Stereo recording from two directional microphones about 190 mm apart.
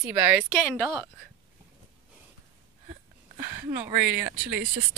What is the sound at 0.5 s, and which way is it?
Speech, centre (ahead or behind).